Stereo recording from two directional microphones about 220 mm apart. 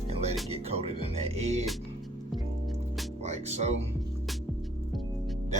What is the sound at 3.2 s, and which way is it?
Music, 30° right (ahead or behind).